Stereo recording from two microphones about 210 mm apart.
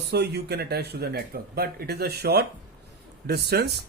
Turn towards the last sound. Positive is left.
turn(degrees=-50)  # may be behind; listen again after turning